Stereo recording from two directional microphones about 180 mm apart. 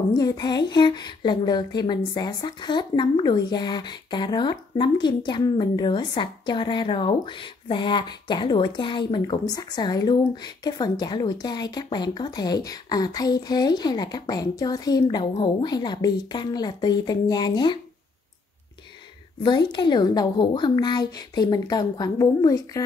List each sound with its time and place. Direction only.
0.1 s speech: 20° left (ahead or behind)
19.4 s speech: 25° left (ahead or behind)